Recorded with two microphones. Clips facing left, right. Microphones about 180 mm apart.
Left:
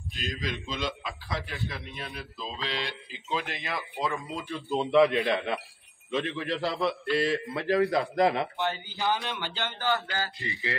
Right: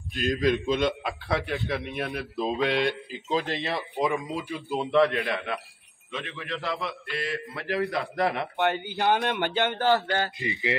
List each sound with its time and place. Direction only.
0.4 s a man's voice: 55° right (ahead or behind); by 4.3 s 15° right (ahead or behind)
4.4 s speech: 5° right (ahead or behind)
5.1 s speech: 20° left (ahead or behind)
6.1 s a man's voice: 35° left (ahead or behind)
8.5 s speech: 60° right (ahead or behind)
10.1 s speech: 20° right (ahead or behind)